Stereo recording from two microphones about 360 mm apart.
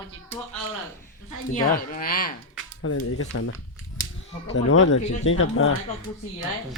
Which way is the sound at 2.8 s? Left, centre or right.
Left.